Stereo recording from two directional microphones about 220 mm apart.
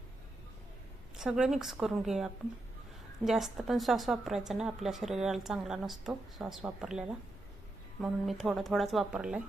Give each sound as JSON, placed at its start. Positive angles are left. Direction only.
{"t": 1.1, "sound": "a woman's voice", "side_deg": -5}